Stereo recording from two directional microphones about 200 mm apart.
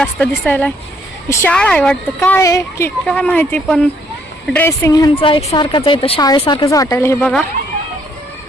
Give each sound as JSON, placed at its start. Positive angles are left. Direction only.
{"t": 0.0, "sound": "a woman's voice", "side_deg": 5}